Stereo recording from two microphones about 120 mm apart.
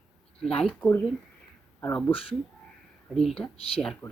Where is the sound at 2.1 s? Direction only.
50° left (ahead or behind).